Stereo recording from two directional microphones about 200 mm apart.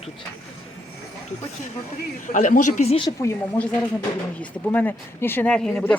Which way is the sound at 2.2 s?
40° left (ahead or behind).